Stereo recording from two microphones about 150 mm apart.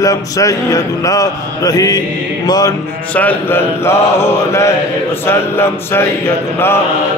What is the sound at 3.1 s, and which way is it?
Mantra, 10° left (ahead or behind).